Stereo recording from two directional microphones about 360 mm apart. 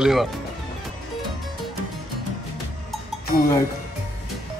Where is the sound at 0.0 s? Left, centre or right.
Centre.